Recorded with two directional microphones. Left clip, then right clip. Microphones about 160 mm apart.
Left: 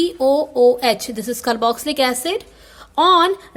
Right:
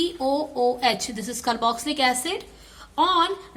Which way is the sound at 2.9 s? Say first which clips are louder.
Left 7 dB; 50° left (ahead or behind).